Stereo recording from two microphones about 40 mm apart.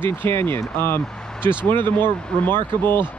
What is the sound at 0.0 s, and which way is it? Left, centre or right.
Speech, left.